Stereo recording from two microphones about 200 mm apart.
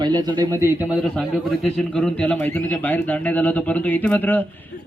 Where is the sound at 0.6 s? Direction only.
10° right (ahead or behind).